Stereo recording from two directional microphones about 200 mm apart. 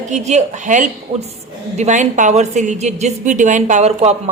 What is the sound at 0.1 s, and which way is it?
A woman's voice, 35° right (ahead or behind).